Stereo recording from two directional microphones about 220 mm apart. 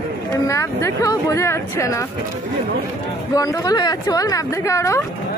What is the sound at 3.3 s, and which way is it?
A woman's voice, 15° left (ahead or behind).